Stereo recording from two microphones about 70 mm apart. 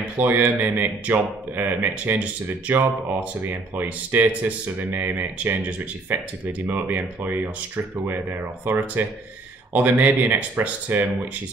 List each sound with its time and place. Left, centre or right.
0.2 s speech: right